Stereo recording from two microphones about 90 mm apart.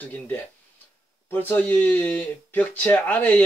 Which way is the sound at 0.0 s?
20° left (ahead or behind).